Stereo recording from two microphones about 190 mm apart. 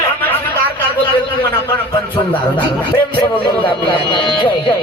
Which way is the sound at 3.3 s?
25° left (ahead or behind).